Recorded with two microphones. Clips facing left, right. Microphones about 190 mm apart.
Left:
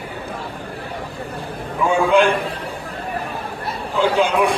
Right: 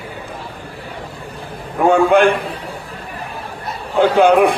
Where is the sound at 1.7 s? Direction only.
60° right (ahead or behind).